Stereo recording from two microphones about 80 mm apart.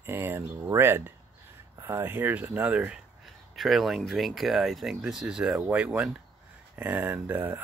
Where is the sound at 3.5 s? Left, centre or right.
Centre; by 7.6 s right.